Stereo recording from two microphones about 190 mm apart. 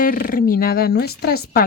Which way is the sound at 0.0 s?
50° left (ahead or behind).